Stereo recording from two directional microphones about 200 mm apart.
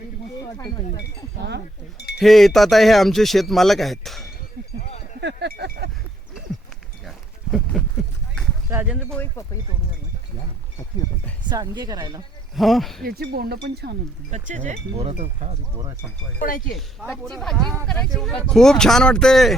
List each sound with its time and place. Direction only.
0.4 s speech: 15° left (ahead or behind)
1.4 s speech: 55° right (ahead or behind)
2.1 s speech: centre (ahead or behind)
4.8 s a sound: 35° left (ahead or behind)
5.2 s a sound: 55° right (ahead or behind)
7.5 s a sound: 5° left (ahead or behind)
8.7 s speech: 5° right (ahead or behind)
9.1 s speech: 10° left (ahead or behind)
11.4 s speech: 20° right (ahead or behind)
12.5 s speech: centre (ahead or behind)
13.1 s speech: 50° right (ahead or behind)
14.3 s speech: 35° right (ahead or behind)
16.4 s speech: 45° left (ahead or behind)
16.7 s speech: centre (ahead or behind)